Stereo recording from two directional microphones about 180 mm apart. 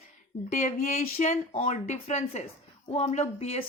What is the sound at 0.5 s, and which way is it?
Speech, 40° left (ahead or behind).